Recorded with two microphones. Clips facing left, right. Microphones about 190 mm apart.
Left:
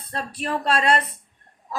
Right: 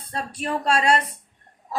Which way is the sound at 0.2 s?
30° right (ahead or behind).